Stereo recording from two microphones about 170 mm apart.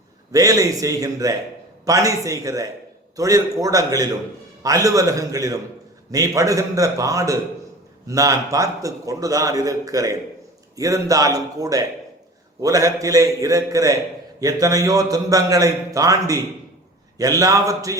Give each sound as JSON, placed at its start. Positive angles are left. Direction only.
{"t": 0.3, "sound": "a man's voice", "side_deg": -20}